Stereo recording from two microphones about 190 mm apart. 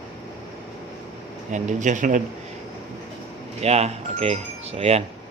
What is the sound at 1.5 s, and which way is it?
Speech, 40° right (ahead or behind).